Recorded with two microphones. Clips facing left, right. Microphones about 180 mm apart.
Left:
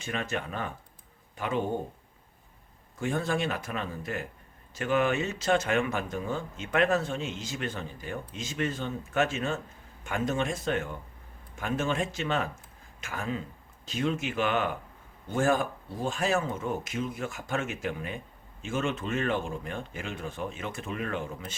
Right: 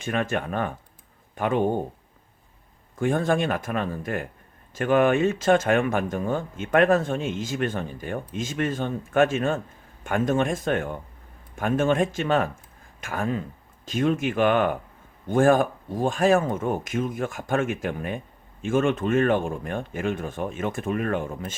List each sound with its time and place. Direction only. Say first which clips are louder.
0.0 s speech: right 7 dB; 55° right (ahead or behind)
3.0 s speech: right 6 dB; 55° right (ahead or behind)